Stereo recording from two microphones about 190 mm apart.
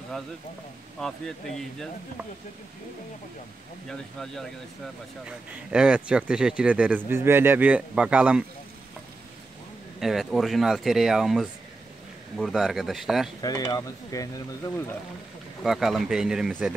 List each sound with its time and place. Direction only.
1.0 s speech: centre (ahead or behind)
3.9 s speech: centre (ahead or behind)
5.7 s speech: 5° right (ahead or behind)
9.9 s speech: centre (ahead or behind)
13.4 s speech: 20° left (ahead or behind)
15.6 s speech: centre (ahead or behind)